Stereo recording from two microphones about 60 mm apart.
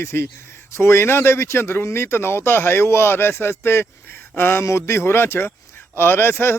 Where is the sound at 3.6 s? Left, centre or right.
Left.